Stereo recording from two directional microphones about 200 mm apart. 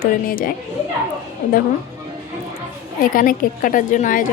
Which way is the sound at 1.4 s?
40° left (ahead or behind).